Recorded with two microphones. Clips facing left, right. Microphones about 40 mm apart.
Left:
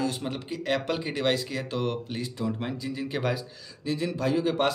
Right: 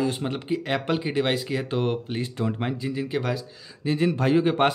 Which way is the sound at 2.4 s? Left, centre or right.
Right.